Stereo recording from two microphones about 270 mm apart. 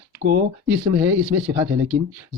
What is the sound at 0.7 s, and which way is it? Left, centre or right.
Speech, centre.